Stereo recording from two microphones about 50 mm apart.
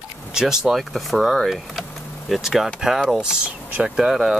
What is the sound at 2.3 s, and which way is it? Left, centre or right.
Speech, centre.